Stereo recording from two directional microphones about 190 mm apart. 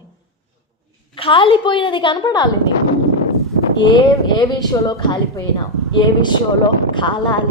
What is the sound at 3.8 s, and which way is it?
A woman's voice, 25° left (ahead or behind).